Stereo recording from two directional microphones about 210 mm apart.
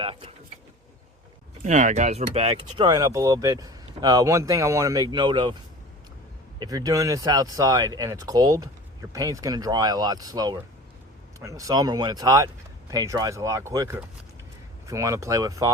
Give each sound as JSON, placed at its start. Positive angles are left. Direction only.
{"t": 0.0, "sound": "speech", "side_deg": -25}
{"t": 1.6, "sound": "speech", "side_deg": -35}
{"t": 6.6, "sound": "speech", "side_deg": -20}